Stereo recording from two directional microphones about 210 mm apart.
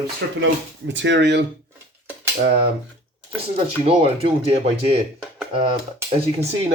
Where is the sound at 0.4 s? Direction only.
60° right (ahead or behind).